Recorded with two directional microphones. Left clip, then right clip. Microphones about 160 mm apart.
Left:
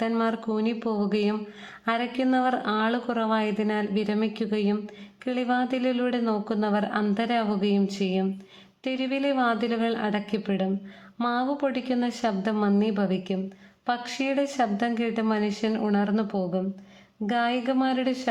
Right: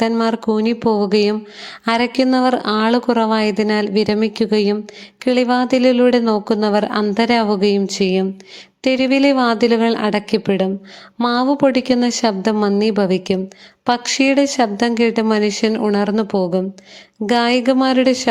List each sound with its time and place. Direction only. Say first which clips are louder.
0.2 s speech: right 9 dB; 35° right (ahead or behind)